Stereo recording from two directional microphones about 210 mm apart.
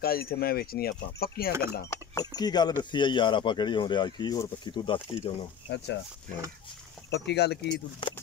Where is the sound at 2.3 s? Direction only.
20° left (ahead or behind).